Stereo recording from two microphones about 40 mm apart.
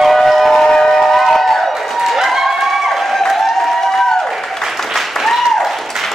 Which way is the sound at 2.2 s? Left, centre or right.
Centre.